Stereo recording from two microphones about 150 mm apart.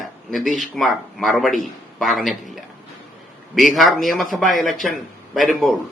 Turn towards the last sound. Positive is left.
turn(degrees=0)  # may be behind; listen again after turning